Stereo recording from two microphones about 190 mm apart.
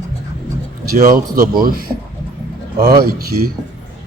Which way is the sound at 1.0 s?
50° right (ahead or behind).